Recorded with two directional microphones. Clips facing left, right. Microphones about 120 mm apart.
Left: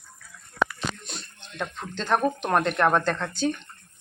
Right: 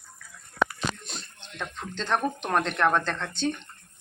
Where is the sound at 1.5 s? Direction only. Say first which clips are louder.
Left 2 dB; 5° left (ahead or behind).